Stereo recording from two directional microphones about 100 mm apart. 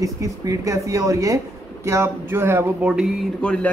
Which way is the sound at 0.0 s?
35° right (ahead or behind).